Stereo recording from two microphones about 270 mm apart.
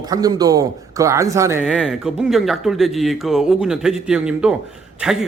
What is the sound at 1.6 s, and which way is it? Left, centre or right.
Speech, centre.